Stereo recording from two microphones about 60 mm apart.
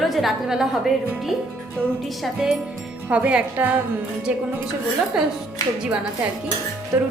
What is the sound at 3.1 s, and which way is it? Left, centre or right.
Speech, right.